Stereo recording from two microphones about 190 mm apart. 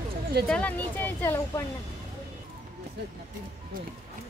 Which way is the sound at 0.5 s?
5° left (ahead or behind).